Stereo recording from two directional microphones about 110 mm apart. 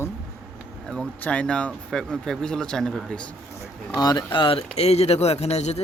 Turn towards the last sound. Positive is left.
turn(degrees=75)  # may be behind; listen again after turning